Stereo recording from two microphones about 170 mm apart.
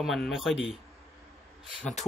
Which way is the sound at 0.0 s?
Centre (ahead or behind).